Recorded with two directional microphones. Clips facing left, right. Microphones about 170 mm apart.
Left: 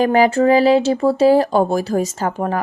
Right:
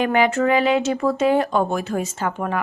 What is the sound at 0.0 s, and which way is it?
Speech, 35° left (ahead or behind).